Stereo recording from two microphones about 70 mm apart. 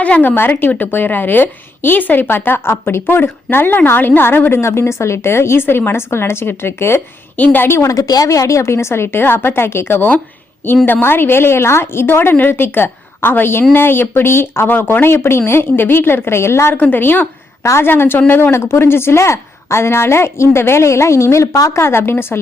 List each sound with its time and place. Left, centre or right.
0.0 s a woman's voice: left
7.3 s a woman's voice: left
7.9 s a woman's voice: left
16.7 s a woman's voice: left
21.8 s a woman's voice: left